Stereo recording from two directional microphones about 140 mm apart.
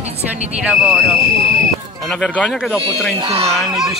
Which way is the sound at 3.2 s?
45° right (ahead or behind).